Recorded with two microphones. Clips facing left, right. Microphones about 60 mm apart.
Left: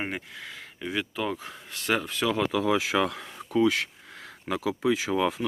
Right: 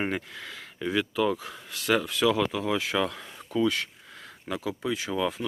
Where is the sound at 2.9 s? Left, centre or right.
Left.